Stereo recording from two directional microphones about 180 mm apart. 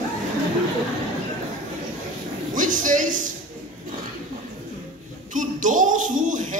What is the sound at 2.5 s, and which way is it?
Speech, 45° right (ahead or behind).